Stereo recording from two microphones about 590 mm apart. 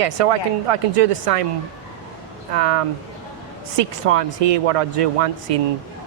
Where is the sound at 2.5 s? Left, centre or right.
Right.